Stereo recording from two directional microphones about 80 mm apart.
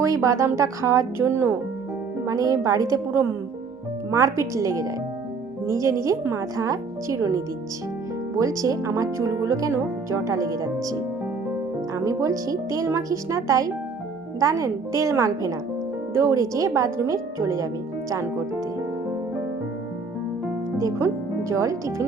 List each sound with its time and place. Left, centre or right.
0.0 s a woman's voice: right
2.2 s a woman's voice: right
11.9 s a woman's voice: right
21.5 s a woman's voice: right